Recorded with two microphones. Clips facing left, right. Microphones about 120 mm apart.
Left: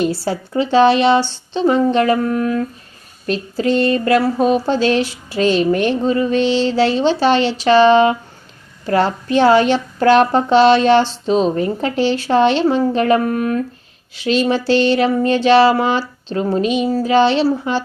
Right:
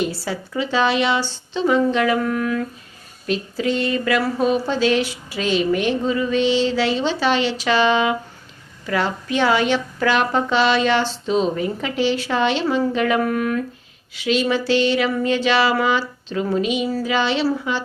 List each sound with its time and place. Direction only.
0.3 s a woman's voice: 35° left (ahead or behind)
3.8 s a woman's voice: 45° left (ahead or behind)